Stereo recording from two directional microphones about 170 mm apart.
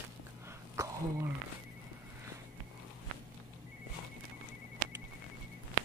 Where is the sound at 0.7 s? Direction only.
20° right (ahead or behind).